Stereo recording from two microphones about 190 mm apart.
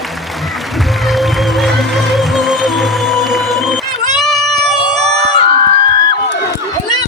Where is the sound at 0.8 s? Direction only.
Centre (ahead or behind).